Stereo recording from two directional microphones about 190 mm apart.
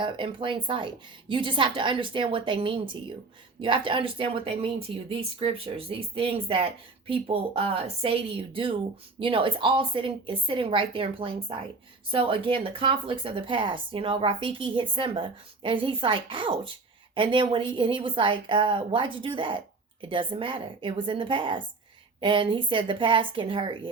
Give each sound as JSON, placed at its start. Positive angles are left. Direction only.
{"t": 0.0, "sound": "speech", "side_deg": -25}